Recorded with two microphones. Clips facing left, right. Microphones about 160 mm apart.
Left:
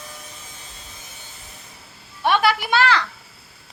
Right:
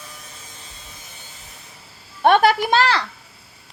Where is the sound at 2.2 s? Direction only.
50° right (ahead or behind).